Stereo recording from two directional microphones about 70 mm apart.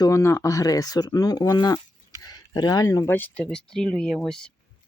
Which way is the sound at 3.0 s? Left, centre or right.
Left.